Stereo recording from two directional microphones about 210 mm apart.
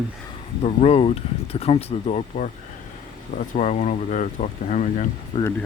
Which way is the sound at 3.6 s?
35° left (ahead or behind).